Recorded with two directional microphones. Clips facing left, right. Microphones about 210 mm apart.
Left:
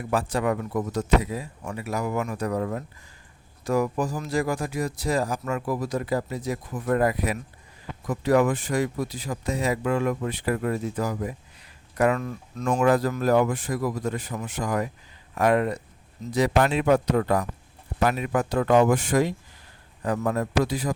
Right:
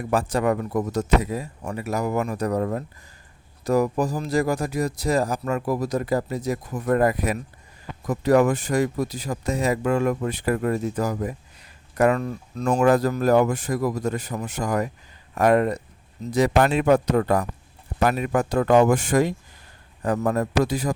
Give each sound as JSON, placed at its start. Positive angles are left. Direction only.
{"t": 0.1, "sound": "speech", "side_deg": -45}